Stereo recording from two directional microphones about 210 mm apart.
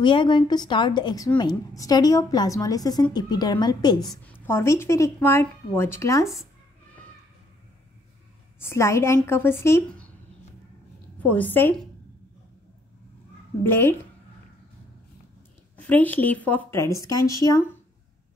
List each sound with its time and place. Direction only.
0.0 s a woman's voice: 25° left (ahead or behind)
8.5 s a woman's voice: 10° left (ahead or behind)
11.1 s a woman's voice: 5° left (ahead or behind)
13.7 s a woman's voice: 10° left (ahead or behind)
15.8 s a woman's voice: 10° left (ahead or behind)